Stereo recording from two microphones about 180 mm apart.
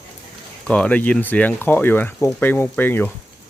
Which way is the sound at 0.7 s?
5° left (ahead or behind).